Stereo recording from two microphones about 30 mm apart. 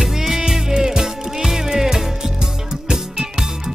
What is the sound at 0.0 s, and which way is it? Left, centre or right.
Music, centre.